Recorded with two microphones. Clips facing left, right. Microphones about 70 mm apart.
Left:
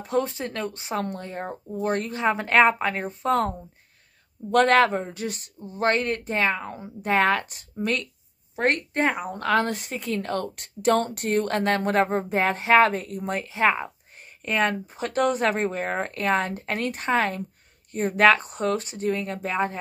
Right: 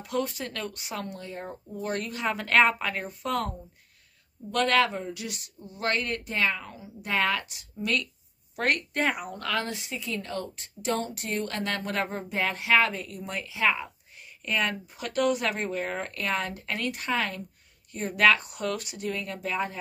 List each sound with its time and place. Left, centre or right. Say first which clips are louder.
0.0 s speech: left 5 dB; left
1.0 s speech: left 5 dB; left
4.5 s a woman's voice: left 6 dB; left
6.7 s a woman's voice: left 7 dB; left
9.7 s a woman's voice: left 5 dB; left